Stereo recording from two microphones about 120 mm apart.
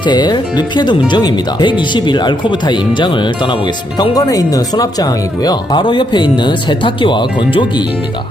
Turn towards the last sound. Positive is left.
turn(degrees=40)  # may be behind; listen again after turning